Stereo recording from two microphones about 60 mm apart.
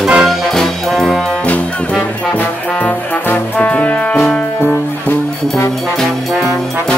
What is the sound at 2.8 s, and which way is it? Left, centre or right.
Trombone, left.